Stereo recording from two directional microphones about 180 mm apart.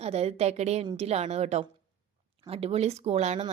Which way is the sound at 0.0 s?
35° right (ahead or behind).